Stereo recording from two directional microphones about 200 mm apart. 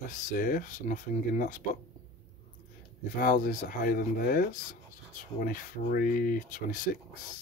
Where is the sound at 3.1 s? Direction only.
40° left (ahead or behind).